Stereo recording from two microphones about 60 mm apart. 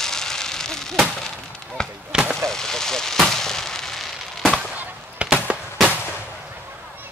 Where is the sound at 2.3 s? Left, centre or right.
Centre.